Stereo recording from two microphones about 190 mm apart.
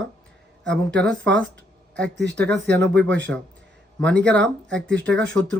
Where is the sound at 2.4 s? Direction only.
65° right (ahead or behind).